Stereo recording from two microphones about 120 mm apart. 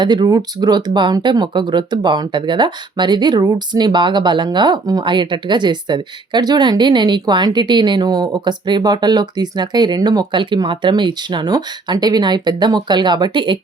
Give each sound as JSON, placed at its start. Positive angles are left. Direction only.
{"t": 0.0, "sound": "speech", "side_deg": -35}